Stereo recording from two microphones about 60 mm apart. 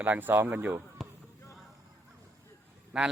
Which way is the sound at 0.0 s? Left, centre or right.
Right.